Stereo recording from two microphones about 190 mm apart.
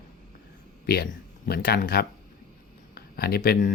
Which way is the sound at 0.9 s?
55° left (ahead or behind).